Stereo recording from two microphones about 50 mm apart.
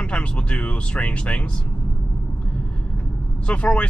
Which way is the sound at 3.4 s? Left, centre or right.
Left.